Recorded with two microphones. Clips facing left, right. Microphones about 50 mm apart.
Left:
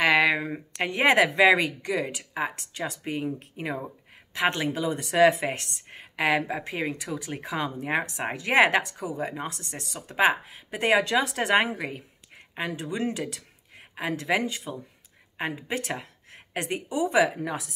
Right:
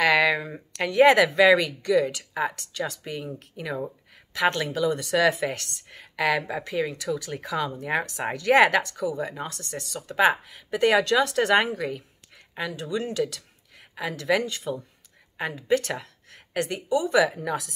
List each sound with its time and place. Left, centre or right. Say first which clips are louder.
0.0 s speech: right 1 dB; left